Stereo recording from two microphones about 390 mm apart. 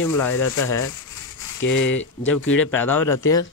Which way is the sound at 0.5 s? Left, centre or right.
Left.